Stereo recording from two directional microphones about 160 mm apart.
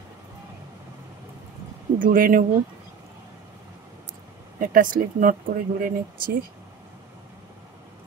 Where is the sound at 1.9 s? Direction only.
60° right (ahead or behind).